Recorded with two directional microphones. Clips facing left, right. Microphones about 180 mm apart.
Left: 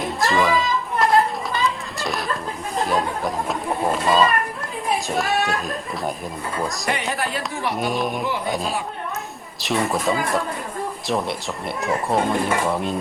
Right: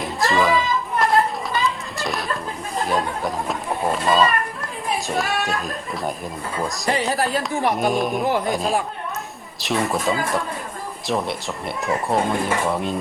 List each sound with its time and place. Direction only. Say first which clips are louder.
0.0 s children playing: even; centre (ahead or behind)
2.7 s a sound: left 1 dB; centre (ahead or behind)
5.0 s speech: even; centre (ahead or behind)
6.9 s speech: right 4 dB; 35° right (ahead or behind)
7.8 s speech: right 3 dB; centre (ahead or behind)